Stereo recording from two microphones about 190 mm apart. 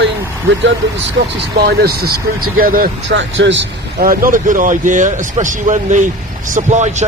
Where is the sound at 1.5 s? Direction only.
55° right (ahead or behind).